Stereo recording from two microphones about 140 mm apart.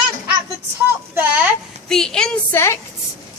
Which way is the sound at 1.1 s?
10° right (ahead or behind).